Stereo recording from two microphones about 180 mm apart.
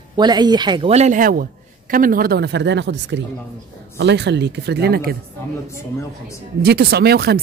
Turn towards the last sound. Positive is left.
turn(degrees=-60)  # may be behind; listen again after turning